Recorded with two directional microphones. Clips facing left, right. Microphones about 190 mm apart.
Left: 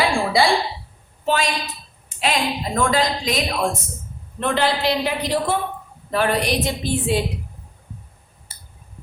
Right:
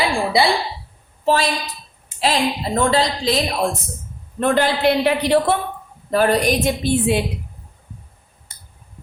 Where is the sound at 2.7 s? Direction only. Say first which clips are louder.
Right 1 dB; 30° right (ahead or behind).